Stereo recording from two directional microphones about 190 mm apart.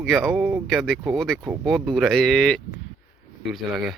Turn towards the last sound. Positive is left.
turn(degrees=0)  # may be behind; listen again after turning